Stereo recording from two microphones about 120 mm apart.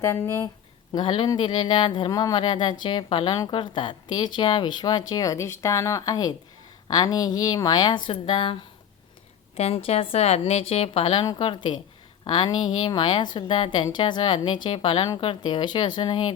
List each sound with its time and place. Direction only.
0.0 s speech: 25° left (ahead or behind)
0.9 s a woman's voice: 45° left (ahead or behind)
9.6 s a woman's voice: 60° left (ahead or behind); by 16.3 s 40° left (ahead or behind)